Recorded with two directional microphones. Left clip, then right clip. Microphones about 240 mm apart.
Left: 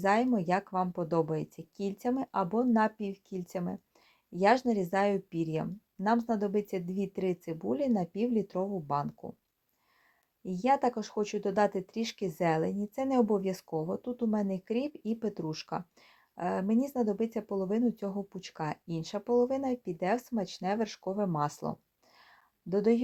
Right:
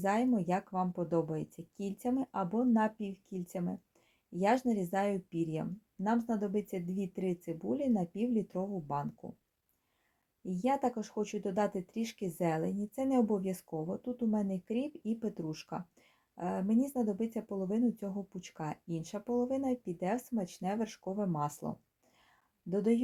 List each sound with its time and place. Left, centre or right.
0.0 s speech: centre
10.4 s speech: centre
13.7 s speech: left
13.9 s speech: centre